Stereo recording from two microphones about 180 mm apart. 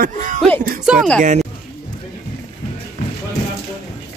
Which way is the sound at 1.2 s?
40° right (ahead or behind).